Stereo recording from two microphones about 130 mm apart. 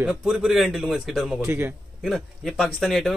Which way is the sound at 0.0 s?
5° right (ahead or behind).